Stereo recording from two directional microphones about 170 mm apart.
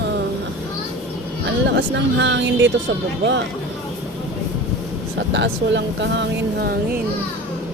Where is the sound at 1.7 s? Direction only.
90° right.